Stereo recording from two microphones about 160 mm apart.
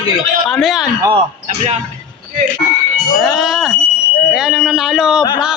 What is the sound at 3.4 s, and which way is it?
Speech, centre (ahead or behind).